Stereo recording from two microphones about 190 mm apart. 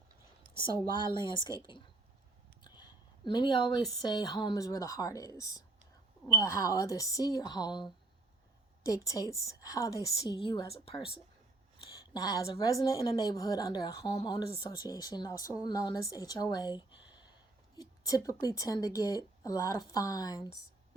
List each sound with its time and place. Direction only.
0.7 s speech: 20° right (ahead or behind)
1.1 s a woman's voice: 25° left (ahead or behind)
2.6 s a woman's voice: 20° left (ahead or behind)
12.1 s a woman's voice: 20° left (ahead or behind)